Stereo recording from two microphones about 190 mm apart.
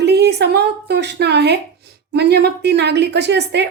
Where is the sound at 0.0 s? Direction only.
60° right (ahead or behind).